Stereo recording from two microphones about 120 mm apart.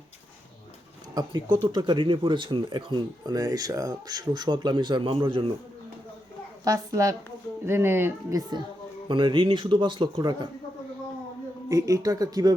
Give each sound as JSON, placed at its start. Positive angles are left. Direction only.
{"t": 1.1, "sound": "speech", "side_deg": -40}
{"t": 6.7, "sound": "speech", "side_deg": -25}
{"t": 8.4, "sound": "speech", "side_deg": -35}
{"t": 11.7, "sound": "speech", "side_deg": -25}